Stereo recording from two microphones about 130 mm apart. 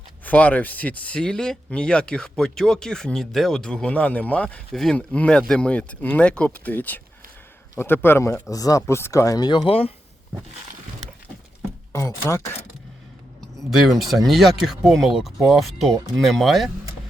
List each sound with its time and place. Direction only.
0.3 s speech: 10° left (ahead or behind); by 9.9 s 45° left (ahead or behind)
11.9 s speech: 20° left (ahead or behind)
13.7 s speech: centre (ahead or behind)